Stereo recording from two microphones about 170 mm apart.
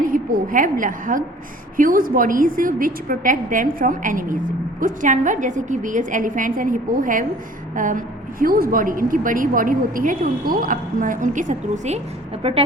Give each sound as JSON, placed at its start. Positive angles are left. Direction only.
{"t": 0.0, "sound": "a woman's voice", "side_deg": -55}
{"t": 12.4, "sound": "speech", "side_deg": -35}